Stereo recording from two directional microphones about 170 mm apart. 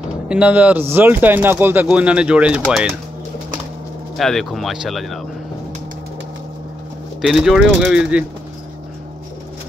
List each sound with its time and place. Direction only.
0.3 s speech: 10° right (ahead or behind)
4.2 s speech: centre (ahead or behind)
7.2 s speech: centre (ahead or behind)